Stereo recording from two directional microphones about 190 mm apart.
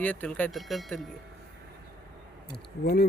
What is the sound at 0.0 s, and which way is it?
Speech, 10° left (ahead or behind).